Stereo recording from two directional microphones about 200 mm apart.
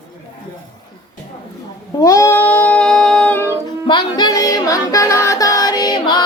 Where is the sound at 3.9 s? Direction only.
20° left (ahead or behind).